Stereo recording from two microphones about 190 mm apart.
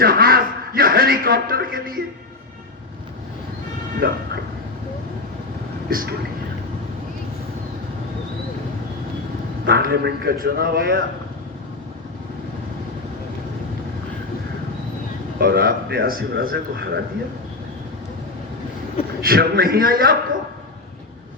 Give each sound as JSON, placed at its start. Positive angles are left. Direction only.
{"t": 0.0, "sound": "a man's voice", "side_deg": -50}
{"t": 4.0, "sound": "a man's voice", "side_deg": -50}
{"t": 5.9, "sound": "a man's voice", "side_deg": -50}
{"t": 9.6, "sound": "speech", "side_deg": -55}
{"t": 15.4, "sound": "a man's voice", "side_deg": -55}
{"t": 19.2, "sound": "a man's voice", "side_deg": -50}